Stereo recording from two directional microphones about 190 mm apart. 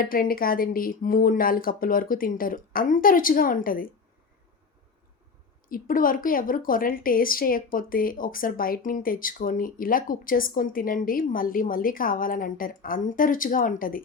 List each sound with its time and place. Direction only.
0.0 s a woman's voice: 50° left (ahead or behind)
5.6 s a woman's voice: 45° left (ahead or behind)